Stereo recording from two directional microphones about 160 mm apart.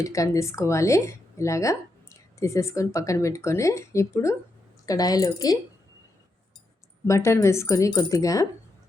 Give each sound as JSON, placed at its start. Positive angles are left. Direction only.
{"t": 0.0, "sound": "speech", "side_deg": 20}
{"t": 7.1, "sound": "speech", "side_deg": 20}